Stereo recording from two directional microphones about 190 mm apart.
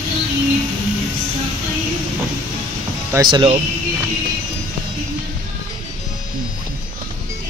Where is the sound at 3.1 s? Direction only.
25° right (ahead or behind).